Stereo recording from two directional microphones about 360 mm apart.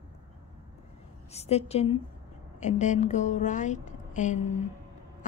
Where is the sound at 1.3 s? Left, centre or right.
Centre.